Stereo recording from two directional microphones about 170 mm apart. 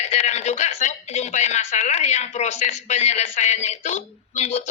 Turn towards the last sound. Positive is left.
turn(degrees=40)  # may be behind; listen again after turning